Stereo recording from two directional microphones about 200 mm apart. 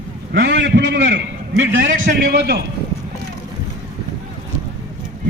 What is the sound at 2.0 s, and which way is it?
Speech, 50° right (ahead or behind).